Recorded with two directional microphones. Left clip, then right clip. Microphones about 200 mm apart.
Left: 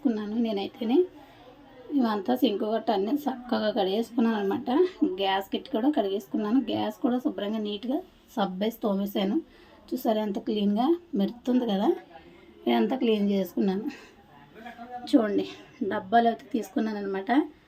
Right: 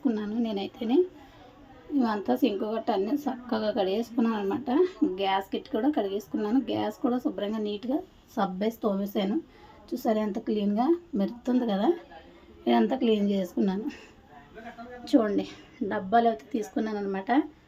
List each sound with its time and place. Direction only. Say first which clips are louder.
0.0 s a sound: left 1 dB; centre (ahead or behind)
2.0 s a woman's voice: left 1 dB; centre (ahead or behind)
15.0 s a woman's voice: even; centre (ahead or behind)